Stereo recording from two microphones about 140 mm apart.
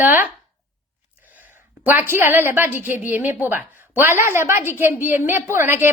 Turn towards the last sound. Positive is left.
turn(degrees=-15)  # may be behind; listen again after turning